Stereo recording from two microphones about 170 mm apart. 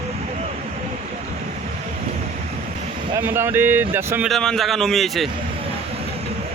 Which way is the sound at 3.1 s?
15° right (ahead or behind).